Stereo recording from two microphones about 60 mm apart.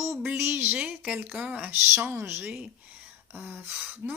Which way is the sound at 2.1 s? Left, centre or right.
Right.